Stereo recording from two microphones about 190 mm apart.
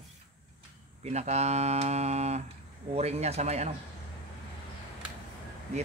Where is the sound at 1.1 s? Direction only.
35° right (ahead or behind).